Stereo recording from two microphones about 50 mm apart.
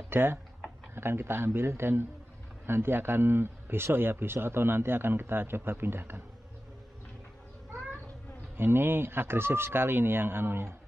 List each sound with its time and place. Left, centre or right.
0.1 s speech: right
8.5 s speech: right